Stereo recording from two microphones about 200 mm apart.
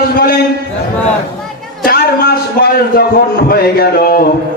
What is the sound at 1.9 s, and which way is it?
Speech, 50° left (ahead or behind).